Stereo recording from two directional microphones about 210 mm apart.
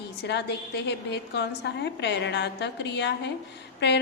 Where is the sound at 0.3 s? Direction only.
55° left (ahead or behind).